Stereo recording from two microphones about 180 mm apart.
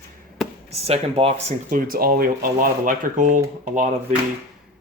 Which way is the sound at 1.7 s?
55° right (ahead or behind).